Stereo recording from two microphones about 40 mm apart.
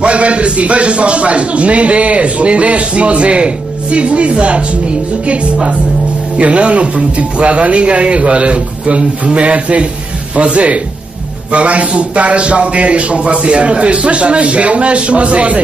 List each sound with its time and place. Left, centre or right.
0.0 s a man's voice: right